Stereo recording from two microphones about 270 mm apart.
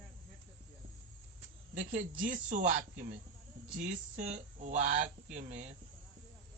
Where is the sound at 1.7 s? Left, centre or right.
Right.